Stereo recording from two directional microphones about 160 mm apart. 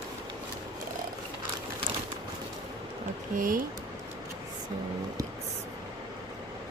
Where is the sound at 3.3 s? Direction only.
60° right (ahead or behind).